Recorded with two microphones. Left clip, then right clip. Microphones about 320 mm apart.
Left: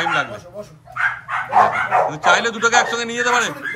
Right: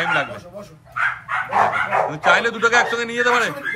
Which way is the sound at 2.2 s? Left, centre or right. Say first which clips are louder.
Left 1 dB; centre.